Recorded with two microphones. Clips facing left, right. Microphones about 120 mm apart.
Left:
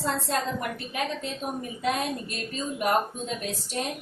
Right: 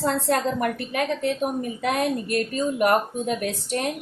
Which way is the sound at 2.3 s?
60° right (ahead or behind).